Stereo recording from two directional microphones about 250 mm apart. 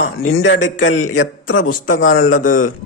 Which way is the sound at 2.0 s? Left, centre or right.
Left.